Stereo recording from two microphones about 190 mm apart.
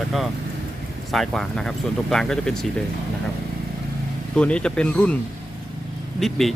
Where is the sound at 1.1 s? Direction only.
Centre (ahead or behind).